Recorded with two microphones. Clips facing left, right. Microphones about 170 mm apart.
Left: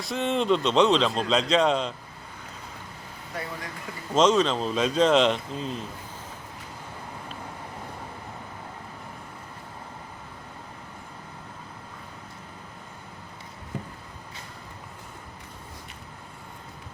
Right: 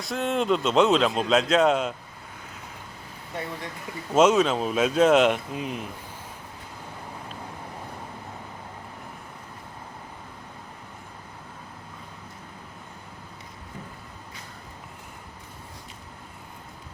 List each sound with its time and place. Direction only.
0.0 s speech: centre (ahead or behind)
4.1 s speech: 10° right (ahead or behind)